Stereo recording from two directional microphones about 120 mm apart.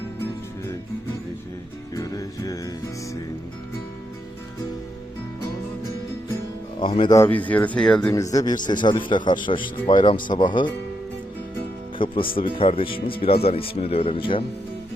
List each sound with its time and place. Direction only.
2.0 s music: 30° left (ahead or behind)
6.7 s speech: 45° left (ahead or behind)
7.3 s speech: 15° left (ahead or behind)
8.1 s a man's voice: 30° left (ahead or behind)
11.9 s speech: 45° left (ahead or behind)